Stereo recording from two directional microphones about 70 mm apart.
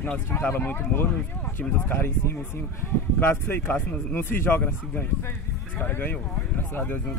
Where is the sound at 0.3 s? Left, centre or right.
Left.